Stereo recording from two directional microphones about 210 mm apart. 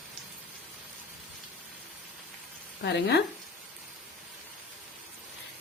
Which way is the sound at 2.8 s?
50° left (ahead or behind).